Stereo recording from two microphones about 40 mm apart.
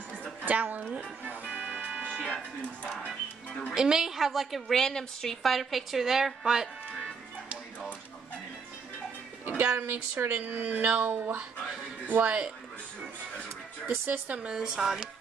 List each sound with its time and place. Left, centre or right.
0.5 s a woman's voice: right
1.2 s music: right
3.7 s a woman's voice: centre
4.7 s a woman's voice: centre
9.5 s a woman's voice: right
9.8 s speech: right
10.8 s speech: right
12.1 s a woman's voice: right
14.0 s speech: right
14.5 s speech: centre